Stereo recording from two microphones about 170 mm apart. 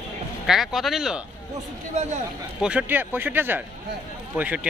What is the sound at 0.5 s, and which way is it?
Speech, centre (ahead or behind).